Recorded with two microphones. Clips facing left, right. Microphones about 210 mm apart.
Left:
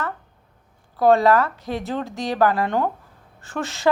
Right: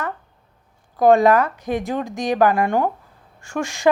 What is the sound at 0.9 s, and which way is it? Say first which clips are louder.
Speech: right 2 dB; 15° right (ahead or behind).